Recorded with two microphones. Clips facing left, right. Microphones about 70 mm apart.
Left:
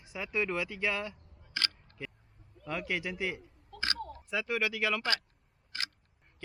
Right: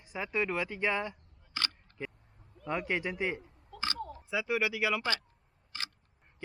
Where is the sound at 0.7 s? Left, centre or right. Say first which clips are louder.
Right 2 dB; right.